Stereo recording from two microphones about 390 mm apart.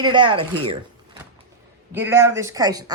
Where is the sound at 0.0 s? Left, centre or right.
Centre.